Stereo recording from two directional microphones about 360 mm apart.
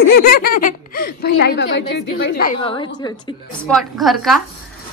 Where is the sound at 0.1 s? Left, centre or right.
Left.